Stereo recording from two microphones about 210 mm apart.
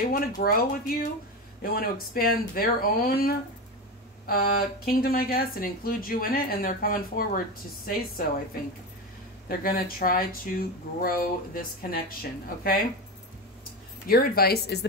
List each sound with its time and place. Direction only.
0.1 s speech: 45° left (ahead or behind)
9.5 s speech: 45° left (ahead or behind)
14.0 s speech: 45° left (ahead or behind)